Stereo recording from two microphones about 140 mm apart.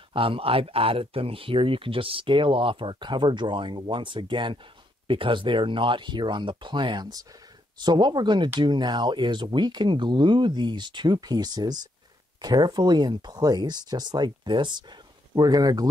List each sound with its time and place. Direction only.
0.1 s speech: 40° right (ahead or behind)